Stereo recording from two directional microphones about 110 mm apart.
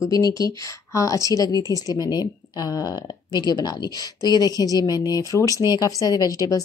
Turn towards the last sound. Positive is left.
turn(degrees=35)  # may be behind; listen again after turning